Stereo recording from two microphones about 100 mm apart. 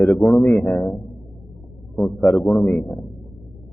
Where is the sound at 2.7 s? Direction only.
20° left (ahead or behind).